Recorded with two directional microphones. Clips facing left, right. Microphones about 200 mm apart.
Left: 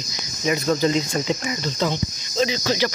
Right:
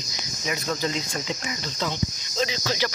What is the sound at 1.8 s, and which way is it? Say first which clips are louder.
Speech: left 3 dB; 30° left (ahead or behind).